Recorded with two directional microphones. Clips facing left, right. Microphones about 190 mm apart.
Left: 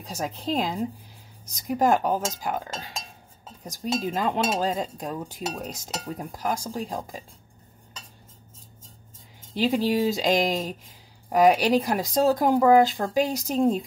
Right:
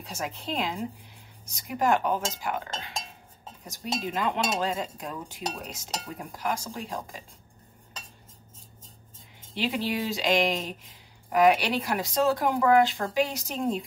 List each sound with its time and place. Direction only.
0.0 s speech: 40° left (ahead or behind)
3.6 s speech: 40° left (ahead or behind)
9.5 s speech: 40° left (ahead or behind)